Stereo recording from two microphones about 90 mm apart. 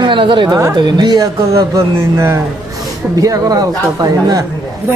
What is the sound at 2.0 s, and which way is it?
A man's voice, 30° right (ahead or behind).